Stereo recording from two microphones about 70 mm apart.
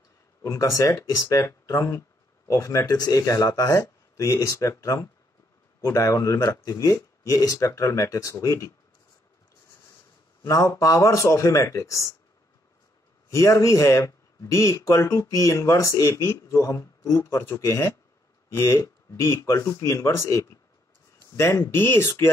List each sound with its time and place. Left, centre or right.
0.4 s speech: left
2.4 s speech: left
10.4 s speech: left
13.3 s speech: left
19.1 s speech: left
21.5 s speech: left